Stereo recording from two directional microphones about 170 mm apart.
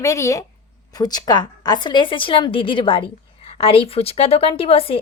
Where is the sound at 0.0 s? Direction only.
20° left (ahead or behind).